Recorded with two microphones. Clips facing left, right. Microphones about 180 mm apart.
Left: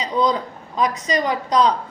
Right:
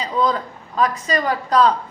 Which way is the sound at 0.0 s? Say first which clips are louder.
Left 1 dB; 15° left (ahead or behind).